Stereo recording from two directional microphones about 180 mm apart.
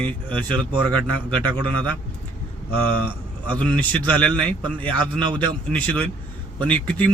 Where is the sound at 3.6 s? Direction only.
10° left (ahead or behind).